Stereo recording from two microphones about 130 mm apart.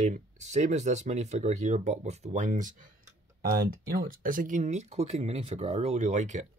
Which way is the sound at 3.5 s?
90° right.